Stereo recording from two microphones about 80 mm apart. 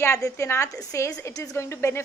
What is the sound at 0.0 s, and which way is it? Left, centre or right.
A woman's voice, left.